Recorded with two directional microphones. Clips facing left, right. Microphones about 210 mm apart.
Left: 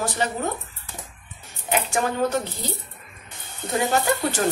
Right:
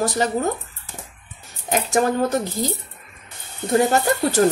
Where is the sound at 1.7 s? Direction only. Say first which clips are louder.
Right 5 dB; 40° right (ahead or behind).